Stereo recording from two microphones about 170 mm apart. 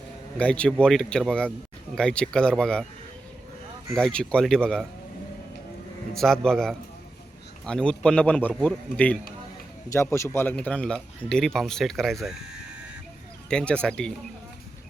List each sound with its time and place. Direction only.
0.3 s a man's voice: 5° left (ahead or behind)
3.9 s speech: 5° left (ahead or behind)
6.1 s a man's voice: 5° left (ahead or behind)
13.5 s speech: 5° left (ahead or behind)